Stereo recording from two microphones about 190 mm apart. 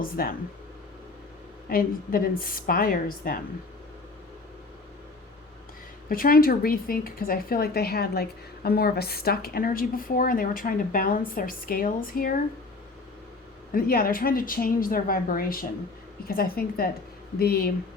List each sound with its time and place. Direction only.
0.0 s a woman's voice: 50° left (ahead or behind)
1.7 s a woman's voice: 50° left (ahead or behind)
6.1 s a woman's voice: 50° left (ahead or behind)
13.7 s a woman's voice: 50° left (ahead or behind)